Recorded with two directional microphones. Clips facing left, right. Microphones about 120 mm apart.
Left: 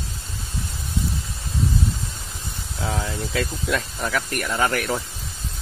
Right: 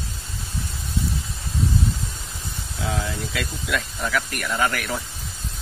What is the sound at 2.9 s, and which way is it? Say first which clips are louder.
Speech: even; 35° left (ahead or behind).